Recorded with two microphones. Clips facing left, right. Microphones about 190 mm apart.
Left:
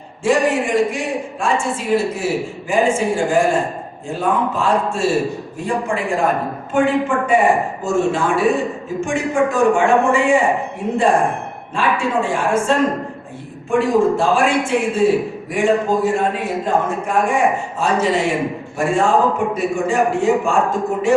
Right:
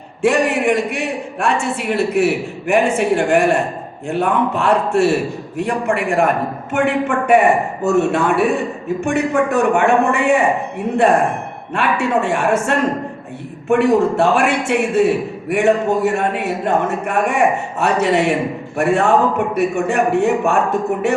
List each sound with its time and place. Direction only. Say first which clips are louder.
0.2 s a man's voice: right 1 dB; 65° right (ahead or behind)
11.7 s a man's voice: right 2 dB; 65° right (ahead or behind)